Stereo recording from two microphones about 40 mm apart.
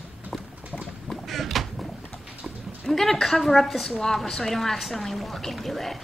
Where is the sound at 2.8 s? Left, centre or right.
Centre.